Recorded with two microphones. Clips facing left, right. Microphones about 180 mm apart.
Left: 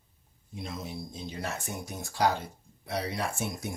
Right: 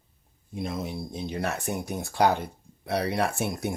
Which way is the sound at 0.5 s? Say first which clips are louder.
Right 6 dB; 60° right (ahead or behind).